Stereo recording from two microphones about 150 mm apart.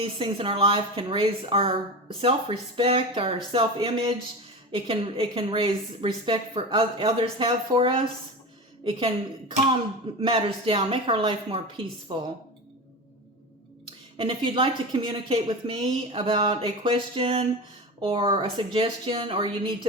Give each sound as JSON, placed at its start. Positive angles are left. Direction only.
{"t": 0.0, "sound": "a woman's voice", "side_deg": -35}
{"t": 14.2, "sound": "a woman's voice", "side_deg": -35}